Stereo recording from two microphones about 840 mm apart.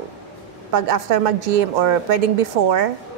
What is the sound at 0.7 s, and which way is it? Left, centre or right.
A woman's voice, right.